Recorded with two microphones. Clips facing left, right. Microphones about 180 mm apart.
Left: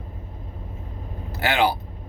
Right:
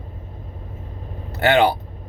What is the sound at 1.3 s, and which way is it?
Speech, 60° right (ahead or behind).